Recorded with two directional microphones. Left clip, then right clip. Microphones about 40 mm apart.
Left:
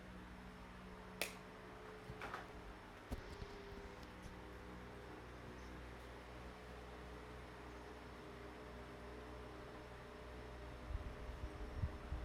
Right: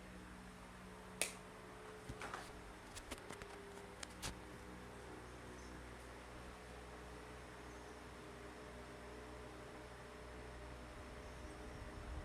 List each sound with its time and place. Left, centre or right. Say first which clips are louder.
1.2 s finger snapping: right 1 dB; left